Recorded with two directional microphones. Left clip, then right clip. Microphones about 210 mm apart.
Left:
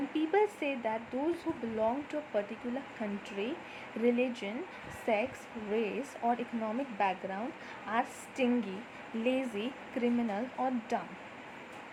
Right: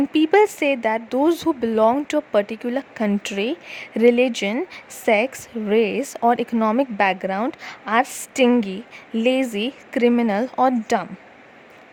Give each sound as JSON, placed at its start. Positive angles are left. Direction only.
{"t": 0.1, "sound": "speech", "side_deg": -55}